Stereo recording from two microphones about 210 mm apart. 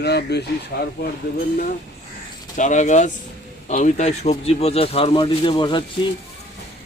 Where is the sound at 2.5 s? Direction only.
35° left (ahead or behind).